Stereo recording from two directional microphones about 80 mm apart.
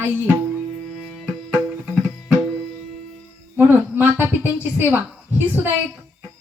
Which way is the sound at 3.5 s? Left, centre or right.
Right.